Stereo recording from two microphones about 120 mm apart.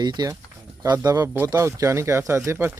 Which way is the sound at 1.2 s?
20° right (ahead or behind).